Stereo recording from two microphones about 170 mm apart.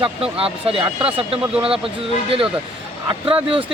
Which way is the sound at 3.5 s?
30° right (ahead or behind).